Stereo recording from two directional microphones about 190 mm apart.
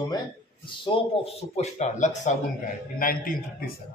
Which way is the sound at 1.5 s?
40° left (ahead or behind).